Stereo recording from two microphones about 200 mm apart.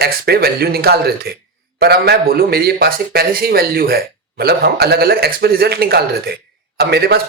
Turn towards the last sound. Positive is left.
turn(degrees=-55)  # may be behind; listen again after turning